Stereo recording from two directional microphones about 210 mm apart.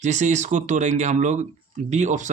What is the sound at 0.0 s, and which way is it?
Speech, 35° right (ahead or behind).